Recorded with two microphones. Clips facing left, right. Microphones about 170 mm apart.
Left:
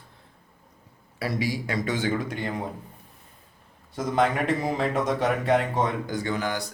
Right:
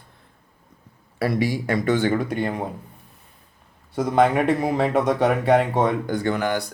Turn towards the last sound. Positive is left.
turn(degrees=-60)  # may be behind; listen again after turning